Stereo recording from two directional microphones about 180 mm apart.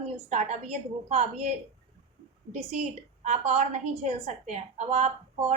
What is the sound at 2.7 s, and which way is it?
A woman's voice, 40° right (ahead or behind).